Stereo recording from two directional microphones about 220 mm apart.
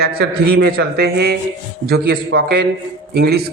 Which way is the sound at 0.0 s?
45° right (ahead or behind).